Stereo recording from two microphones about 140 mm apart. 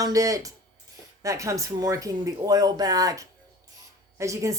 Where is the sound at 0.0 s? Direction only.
25° right (ahead or behind).